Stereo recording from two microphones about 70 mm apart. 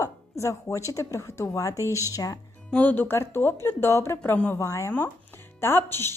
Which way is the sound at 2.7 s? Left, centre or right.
Left.